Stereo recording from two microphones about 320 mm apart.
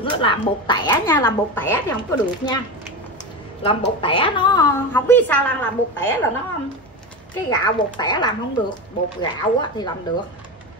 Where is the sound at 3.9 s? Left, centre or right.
Centre.